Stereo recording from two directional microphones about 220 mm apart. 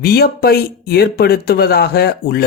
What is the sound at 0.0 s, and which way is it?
Speech, 45° left (ahead or behind).